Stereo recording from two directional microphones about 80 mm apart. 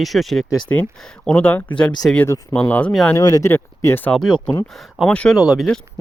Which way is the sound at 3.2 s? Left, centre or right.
Left.